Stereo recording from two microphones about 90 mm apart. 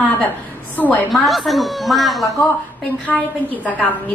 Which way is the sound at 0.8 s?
20° left (ahead or behind).